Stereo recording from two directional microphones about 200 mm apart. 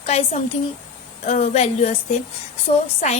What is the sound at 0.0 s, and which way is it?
A woman's voice, 30° left (ahead or behind).